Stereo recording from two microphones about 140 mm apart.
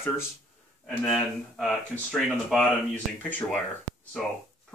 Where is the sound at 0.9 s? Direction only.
5° left (ahead or behind).